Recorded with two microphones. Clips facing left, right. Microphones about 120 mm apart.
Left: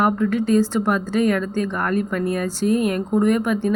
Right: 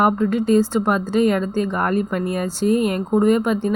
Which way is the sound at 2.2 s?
5° right (ahead or behind).